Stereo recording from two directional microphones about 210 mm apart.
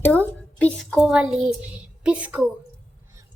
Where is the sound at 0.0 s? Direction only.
10° left (ahead or behind).